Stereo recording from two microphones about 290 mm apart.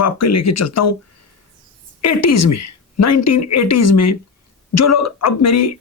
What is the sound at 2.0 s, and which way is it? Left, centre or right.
Speech, left.